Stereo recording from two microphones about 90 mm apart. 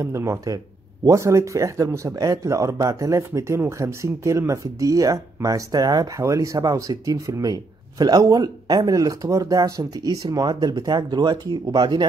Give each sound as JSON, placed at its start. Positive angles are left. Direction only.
{"t": 0.0, "sound": "speech", "side_deg": -30}